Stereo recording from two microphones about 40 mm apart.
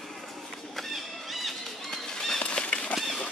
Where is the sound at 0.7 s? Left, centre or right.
Centre.